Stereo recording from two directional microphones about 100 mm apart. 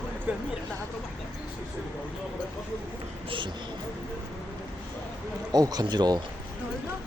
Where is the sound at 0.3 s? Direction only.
15° right (ahead or behind).